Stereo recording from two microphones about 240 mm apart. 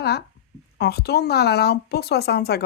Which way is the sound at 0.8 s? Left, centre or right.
Left.